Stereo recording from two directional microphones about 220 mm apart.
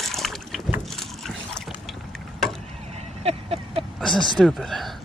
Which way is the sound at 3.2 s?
25° right (ahead or behind).